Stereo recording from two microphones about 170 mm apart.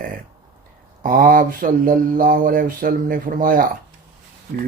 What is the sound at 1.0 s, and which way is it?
Mantra, 55° right (ahead or behind).